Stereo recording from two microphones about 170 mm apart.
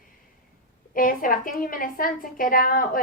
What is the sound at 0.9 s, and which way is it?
A woman's voice, 55° left (ahead or behind).